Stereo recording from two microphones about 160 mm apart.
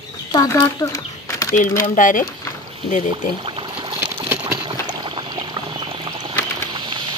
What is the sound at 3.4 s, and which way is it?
Pour, 35° right (ahead or behind).